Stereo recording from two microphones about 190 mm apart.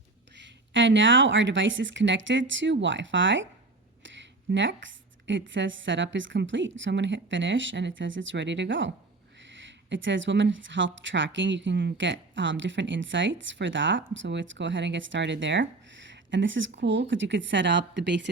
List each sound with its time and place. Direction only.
0.3 s speech: 70° right (ahead or behind)